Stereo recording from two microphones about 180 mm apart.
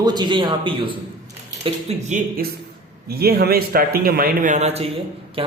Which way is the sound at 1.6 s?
40° right (ahead or behind).